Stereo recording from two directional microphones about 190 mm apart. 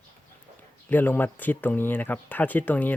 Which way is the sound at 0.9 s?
10° left (ahead or behind).